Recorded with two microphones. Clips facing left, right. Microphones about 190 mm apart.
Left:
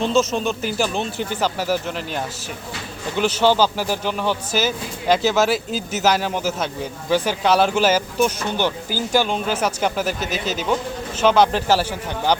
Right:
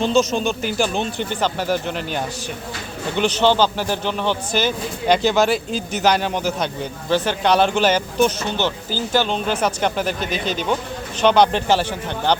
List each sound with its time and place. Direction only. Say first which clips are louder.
0.0 s speech: right 1 dB; centre (ahead or behind)